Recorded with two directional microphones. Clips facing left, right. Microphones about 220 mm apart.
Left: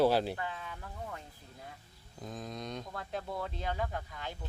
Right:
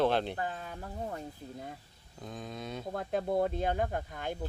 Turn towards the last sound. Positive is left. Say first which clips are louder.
# right 5 dB
turn(degrees=-50)  # may be behind; listen again after turning